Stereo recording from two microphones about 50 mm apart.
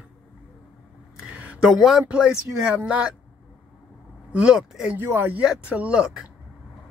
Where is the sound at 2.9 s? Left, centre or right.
Right.